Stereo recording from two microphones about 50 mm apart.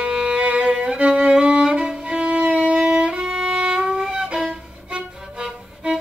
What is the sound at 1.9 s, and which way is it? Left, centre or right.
Music, centre.